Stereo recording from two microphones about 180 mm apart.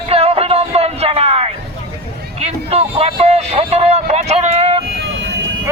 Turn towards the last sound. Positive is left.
turn(degrees=-35)  # may be behind; listen again after turning